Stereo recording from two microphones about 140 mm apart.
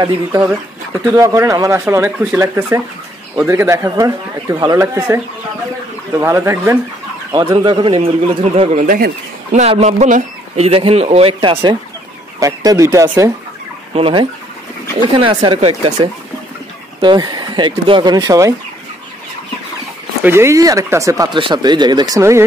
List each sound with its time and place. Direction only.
0.0 s speech: 20° right (ahead or behind)
7.3 s speech: 35° right (ahead or behind)
8.5 s speech: 50° right (ahead or behind)
8.8 s speech: 80° right
9.6 s speech: 55° right (ahead or behind); by 11.7 s 40° right (ahead or behind)
12.4 s speech: 25° right (ahead or behind)
13.9 s speech: 40° right (ahead or behind); by 18.5 s 25° right (ahead or behind)
20.2 s speech: 20° right (ahead or behind)